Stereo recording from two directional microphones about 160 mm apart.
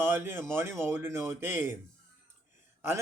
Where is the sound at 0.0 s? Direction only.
15° right (ahead or behind).